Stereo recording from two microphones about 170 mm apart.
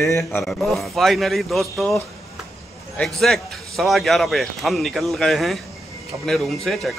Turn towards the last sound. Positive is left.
turn(degrees=0)  # may be behind; listen again after turning